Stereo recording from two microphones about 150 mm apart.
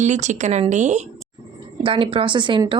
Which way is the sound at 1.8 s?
35° right (ahead or behind).